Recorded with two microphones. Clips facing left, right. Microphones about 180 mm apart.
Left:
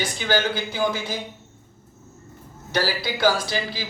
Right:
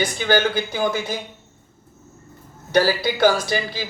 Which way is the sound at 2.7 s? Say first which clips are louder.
Right 6 dB; 55° right (ahead or behind).